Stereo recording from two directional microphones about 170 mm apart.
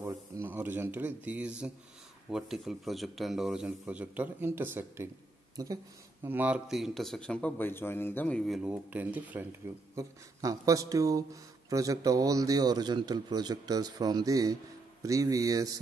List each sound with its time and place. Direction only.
0.0 s a man's voice: 15° right (ahead or behind)
6.2 s a man's voice: 10° right (ahead or behind)
9.9 s a man's voice: 20° right (ahead or behind)